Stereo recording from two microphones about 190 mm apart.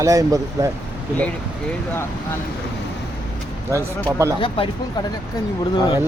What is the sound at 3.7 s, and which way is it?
Speech, 15° right (ahead or behind).